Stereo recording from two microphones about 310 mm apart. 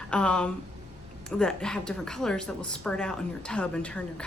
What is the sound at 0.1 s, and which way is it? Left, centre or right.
A woman's voice, centre.